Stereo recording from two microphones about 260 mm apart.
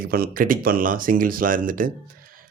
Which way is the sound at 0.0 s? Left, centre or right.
Right.